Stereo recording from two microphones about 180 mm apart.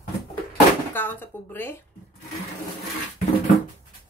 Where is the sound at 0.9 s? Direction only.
10° left (ahead or behind).